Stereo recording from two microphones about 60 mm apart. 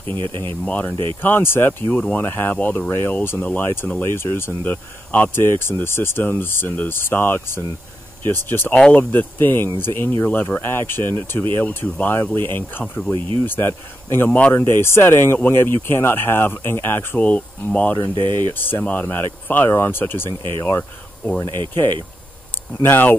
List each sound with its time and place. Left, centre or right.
0.7 s speech: left
1.9 s speech: left
2.2 s speech: left
2.5 s speech: left
3.6 s speech: left
4.6 s speech: left
5.3 s speech: left
8.7 s speech: centre
9.1 s speech: left
17.2 s speech: left
18.0 s speech: left